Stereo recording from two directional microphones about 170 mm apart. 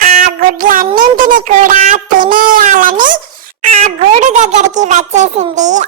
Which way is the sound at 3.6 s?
45° right (ahead or behind).